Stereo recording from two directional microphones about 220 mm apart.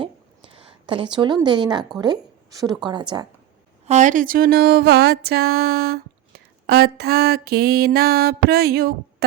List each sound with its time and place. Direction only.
0.0 s a sound: 25° right (ahead or behind)
2.0 s a woman's voice: 15° right (ahead or behind)
3.8 s mantra: 35° right (ahead or behind)